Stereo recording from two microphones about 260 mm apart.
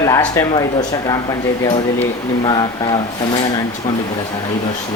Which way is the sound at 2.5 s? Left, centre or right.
Centre.